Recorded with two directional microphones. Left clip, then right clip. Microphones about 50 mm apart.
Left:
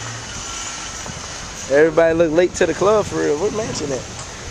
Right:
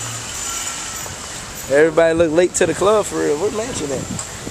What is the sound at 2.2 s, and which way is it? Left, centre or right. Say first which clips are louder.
Speech: right 1 dB; centre.